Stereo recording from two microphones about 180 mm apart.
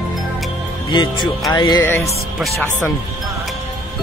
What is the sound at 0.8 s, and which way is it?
Speech, 25° left (ahead or behind).